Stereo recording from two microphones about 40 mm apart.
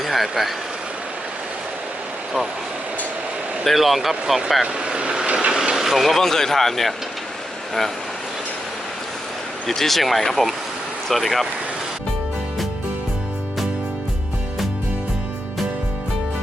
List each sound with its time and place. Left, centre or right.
0.0 s speech: centre
3.6 s speech: centre
4.6 s vehicle: right
5.7 s vehicle: centre
6.2 s speech: centre
9.6 s speech: centre